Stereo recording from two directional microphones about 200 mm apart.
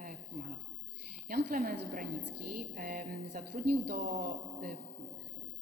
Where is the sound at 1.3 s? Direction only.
45° right (ahead or behind).